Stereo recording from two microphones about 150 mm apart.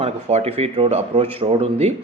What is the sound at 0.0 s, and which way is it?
A man's voice, 45° right (ahead or behind).